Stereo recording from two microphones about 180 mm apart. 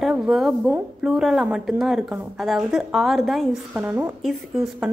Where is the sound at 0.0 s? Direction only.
Centre (ahead or behind).